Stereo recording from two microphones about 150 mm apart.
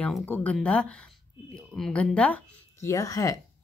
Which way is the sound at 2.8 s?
20° left (ahead or behind).